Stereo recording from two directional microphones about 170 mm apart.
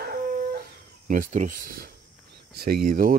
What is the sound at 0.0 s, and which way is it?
Dog, 65° right (ahead or behind).